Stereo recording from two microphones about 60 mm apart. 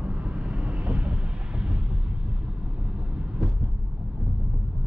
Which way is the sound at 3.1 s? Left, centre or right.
Centre.